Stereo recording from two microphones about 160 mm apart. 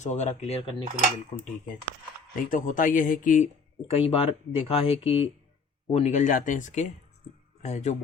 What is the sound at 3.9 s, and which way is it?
Speech, 35° left (ahead or behind).